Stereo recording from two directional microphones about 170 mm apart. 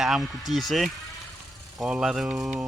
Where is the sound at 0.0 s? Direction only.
Centre (ahead or behind).